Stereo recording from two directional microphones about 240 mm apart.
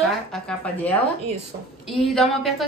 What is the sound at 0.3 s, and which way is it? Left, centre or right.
A woman's voice, centre.